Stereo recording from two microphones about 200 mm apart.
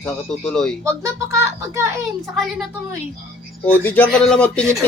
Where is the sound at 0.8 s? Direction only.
15° right (ahead or behind).